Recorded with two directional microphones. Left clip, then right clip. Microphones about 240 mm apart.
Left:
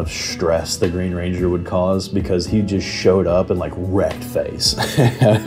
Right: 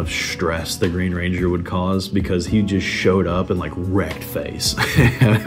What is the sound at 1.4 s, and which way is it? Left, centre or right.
Speech, right.